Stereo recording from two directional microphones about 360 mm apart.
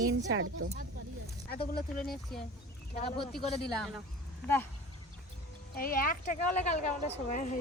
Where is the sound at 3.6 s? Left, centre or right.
Centre.